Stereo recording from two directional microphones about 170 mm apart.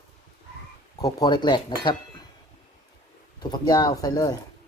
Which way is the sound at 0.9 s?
25° left (ahead or behind).